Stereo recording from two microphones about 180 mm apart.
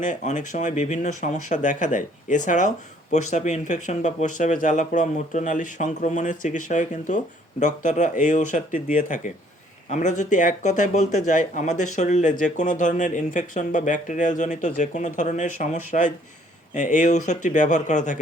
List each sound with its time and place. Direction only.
0.0 s speech: 45° left (ahead or behind)